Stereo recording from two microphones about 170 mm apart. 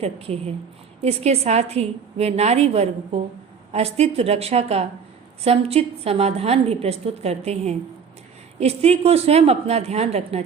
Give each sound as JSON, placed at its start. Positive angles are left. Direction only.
{"t": 0.0, "sound": "a woman's voice", "side_deg": -35}